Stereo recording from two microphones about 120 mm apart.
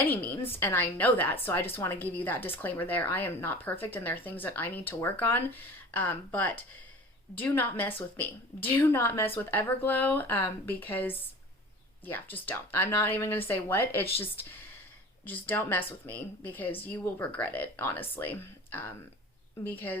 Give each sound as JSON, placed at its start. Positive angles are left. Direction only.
{"t": 0.0, "sound": "a woman's voice", "side_deg": 15}